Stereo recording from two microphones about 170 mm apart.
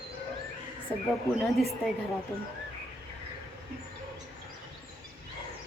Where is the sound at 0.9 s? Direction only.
10° left (ahead or behind).